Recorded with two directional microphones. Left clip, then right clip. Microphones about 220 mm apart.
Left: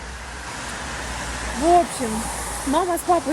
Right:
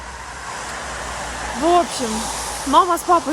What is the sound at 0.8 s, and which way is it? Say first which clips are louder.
Vehicle: right 2 dB; 45° right (ahead or behind).